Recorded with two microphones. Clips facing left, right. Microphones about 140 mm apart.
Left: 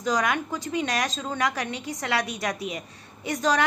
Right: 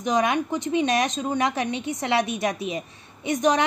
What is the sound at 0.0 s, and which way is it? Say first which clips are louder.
Speech: right 3 dB; 25° right (ahead or behind).